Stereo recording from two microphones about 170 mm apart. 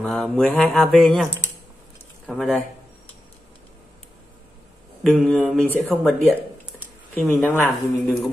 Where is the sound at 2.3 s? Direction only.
Centre (ahead or behind).